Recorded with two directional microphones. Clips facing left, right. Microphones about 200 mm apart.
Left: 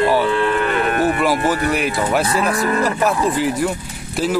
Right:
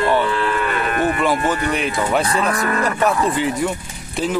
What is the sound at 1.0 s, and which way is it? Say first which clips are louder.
Speech: right 1 dB; 5° left (ahead or behind).